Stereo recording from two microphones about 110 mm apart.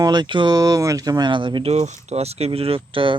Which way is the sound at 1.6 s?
90° right.